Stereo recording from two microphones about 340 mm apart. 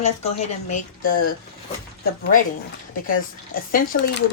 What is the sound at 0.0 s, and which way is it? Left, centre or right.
Speech, centre.